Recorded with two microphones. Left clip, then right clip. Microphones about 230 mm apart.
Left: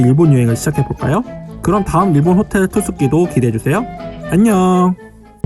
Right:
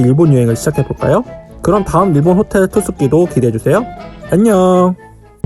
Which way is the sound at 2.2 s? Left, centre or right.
Left.